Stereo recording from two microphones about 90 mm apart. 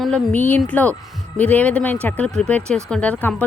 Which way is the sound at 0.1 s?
20° left (ahead or behind).